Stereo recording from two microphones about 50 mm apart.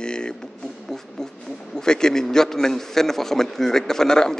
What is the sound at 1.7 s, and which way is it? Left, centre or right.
A man's voice, centre.